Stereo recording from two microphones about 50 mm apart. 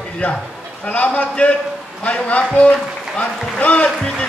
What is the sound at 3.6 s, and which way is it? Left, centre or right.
Speech, left.